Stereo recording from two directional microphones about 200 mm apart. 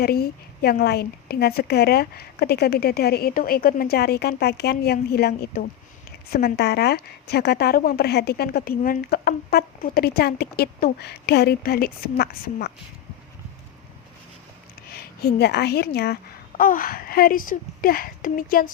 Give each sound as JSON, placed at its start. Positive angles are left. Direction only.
{"t": 0.0, "sound": "a woman's voice", "side_deg": 50}
{"t": 14.8, "sound": "a woman's voice", "side_deg": 50}